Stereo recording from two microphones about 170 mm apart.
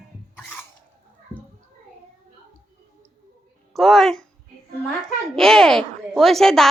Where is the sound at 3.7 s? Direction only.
Centre (ahead or behind).